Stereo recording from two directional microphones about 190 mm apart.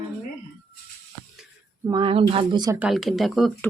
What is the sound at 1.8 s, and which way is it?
Speech, 25° right (ahead or behind).